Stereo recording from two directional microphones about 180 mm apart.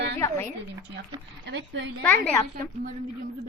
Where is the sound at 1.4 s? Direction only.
75° right (ahead or behind).